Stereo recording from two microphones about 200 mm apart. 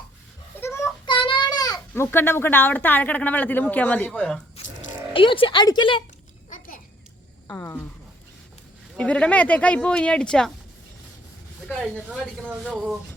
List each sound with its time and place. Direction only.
0.6 s child singing: 15° left (ahead or behind)
1.0 s a child's voice: 25° left (ahead or behind); by 4.4 s 5° left (ahead or behind)
5.1 s a woman's voice: 25° left (ahead or behind)
7.4 s speech: 10° left (ahead or behind)
9.0 s speech: 5° left (ahead or behind)
11.7 s speech: 5° left (ahead or behind)